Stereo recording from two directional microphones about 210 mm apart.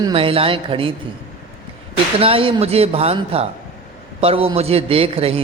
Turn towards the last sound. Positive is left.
turn(degrees=-25)  # may be behind; listen again after turning